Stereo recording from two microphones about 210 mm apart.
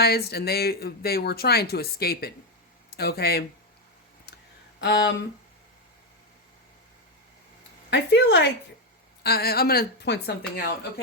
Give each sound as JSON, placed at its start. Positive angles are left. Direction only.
{"t": 0.0, "sound": "speech", "side_deg": 50}
{"t": 4.8, "sound": "speech", "side_deg": 55}
{"t": 7.9, "sound": "speech", "side_deg": 55}